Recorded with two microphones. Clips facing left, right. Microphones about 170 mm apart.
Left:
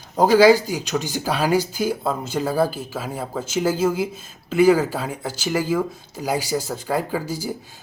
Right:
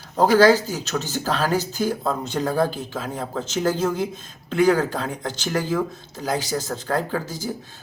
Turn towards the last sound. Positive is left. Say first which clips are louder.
# left 1 dB
turn(degrees=10)  # may be behind; listen again after turning